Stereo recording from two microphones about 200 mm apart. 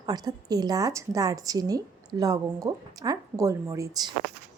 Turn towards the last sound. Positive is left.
turn(degrees=-15)  # may be behind; listen again after turning